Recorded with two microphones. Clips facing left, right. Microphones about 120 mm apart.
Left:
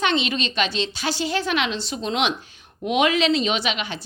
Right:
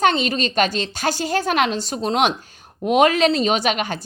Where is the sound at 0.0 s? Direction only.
45° right (ahead or behind).